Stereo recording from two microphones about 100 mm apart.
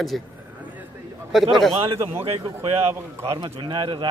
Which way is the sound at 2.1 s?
70° right (ahead or behind).